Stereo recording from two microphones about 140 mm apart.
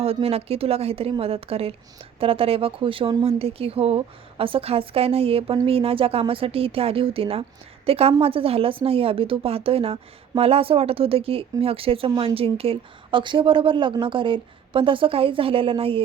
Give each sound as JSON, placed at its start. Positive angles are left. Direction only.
{"t": 0.0, "sound": "a woman's voice", "side_deg": -45}